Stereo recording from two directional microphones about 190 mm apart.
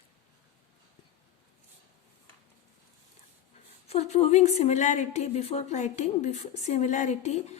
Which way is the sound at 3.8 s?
35° left (ahead or behind).